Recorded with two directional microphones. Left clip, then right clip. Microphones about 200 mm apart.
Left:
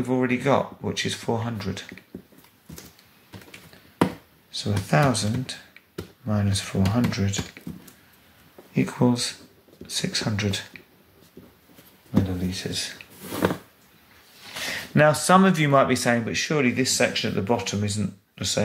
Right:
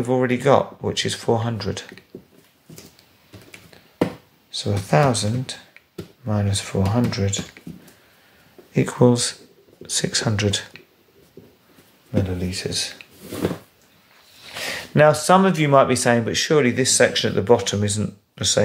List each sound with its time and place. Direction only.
0.0 s speech: 25° right (ahead or behind)
4.5 s speech: 15° right (ahead or behind)
8.7 s speech: 30° right (ahead or behind)
12.5 s speech: 25° right (ahead or behind)
14.7 s speech: 15° right (ahead or behind)